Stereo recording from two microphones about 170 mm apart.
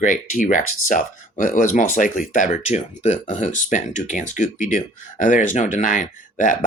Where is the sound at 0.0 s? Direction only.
50° left (ahead or behind).